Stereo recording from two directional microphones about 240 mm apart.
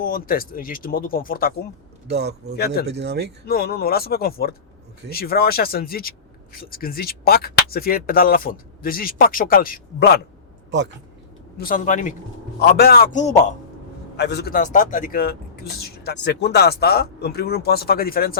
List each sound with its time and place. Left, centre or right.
0.0 s speech: left
2.0 s speech: right
2.6 s speech: left
2.8 s speech: right
3.4 s speech: left
11.5 s speech: left
14.2 s speech: left